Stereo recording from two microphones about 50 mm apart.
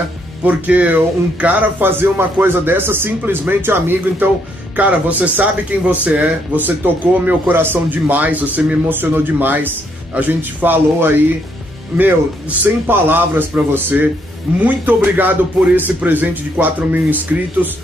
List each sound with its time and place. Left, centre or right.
0.4 s a man's voice: right
4.7 s speech: right
12.8 s a man's voice: right